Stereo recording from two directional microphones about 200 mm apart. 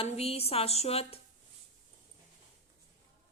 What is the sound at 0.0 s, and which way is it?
A woman's voice, 30° left (ahead or behind).